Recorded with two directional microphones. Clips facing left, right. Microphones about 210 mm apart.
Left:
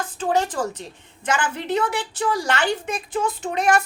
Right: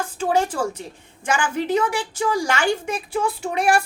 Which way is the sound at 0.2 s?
10° right (ahead or behind).